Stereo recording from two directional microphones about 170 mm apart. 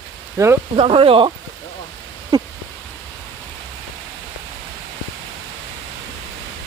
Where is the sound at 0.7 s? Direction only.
35° right (ahead or behind).